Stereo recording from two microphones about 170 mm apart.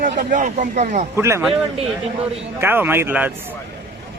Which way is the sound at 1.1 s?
15° right (ahead or behind).